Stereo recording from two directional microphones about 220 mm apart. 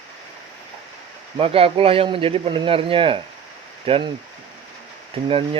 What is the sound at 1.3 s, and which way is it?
Speech, 25° right (ahead or behind).